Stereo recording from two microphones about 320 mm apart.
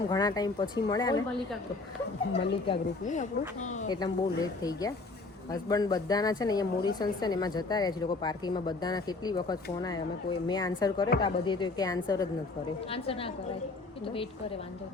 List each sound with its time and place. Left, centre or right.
0.1 s speech: centre
2.6 s speech: left
4.0 s speech: centre